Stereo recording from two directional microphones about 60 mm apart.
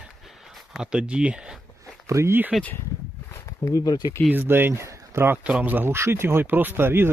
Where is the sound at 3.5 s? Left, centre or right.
Left.